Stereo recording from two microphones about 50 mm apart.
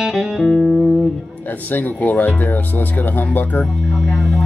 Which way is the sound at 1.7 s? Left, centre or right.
Left.